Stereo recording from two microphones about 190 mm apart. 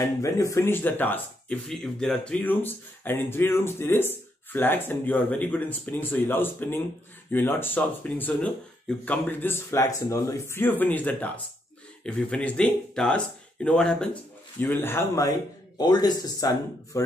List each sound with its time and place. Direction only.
0.2 s speech: 15° left (ahead or behind)